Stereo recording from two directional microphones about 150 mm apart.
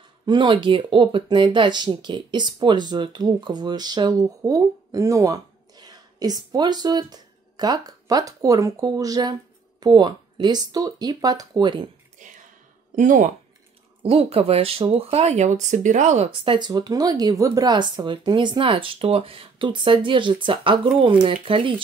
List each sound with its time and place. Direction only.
0.2 s speech: 30° right (ahead or behind)
12.2 s a sound: 55° right (ahead or behind)
12.9 s speech: 55° right (ahead or behind)
14.0 s speech: 40° right (ahead or behind)
16.3 s speech: 35° right (ahead or behind)